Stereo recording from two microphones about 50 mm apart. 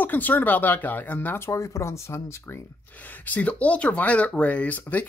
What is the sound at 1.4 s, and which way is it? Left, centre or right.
Speech, left.